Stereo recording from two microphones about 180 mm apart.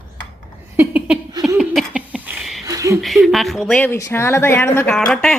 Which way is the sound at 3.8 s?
15° left (ahead or behind).